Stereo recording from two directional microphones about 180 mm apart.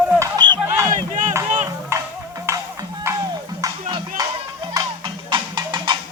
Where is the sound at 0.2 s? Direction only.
25° right (ahead or behind).